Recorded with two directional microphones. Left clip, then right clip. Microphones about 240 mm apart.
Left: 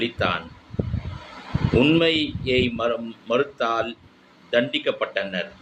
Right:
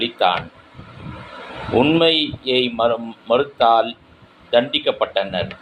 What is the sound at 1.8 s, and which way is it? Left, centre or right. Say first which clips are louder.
Speech: right 4 dB; centre.